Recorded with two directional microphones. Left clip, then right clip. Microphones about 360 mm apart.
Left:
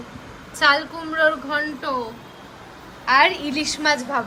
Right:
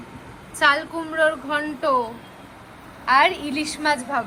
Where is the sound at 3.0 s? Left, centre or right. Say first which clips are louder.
Left 1 dB; centre.